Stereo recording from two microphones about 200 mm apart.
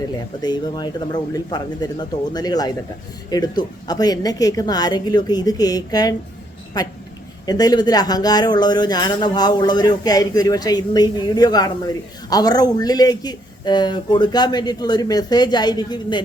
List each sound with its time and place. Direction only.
0.4 s speech: 20° left (ahead or behind)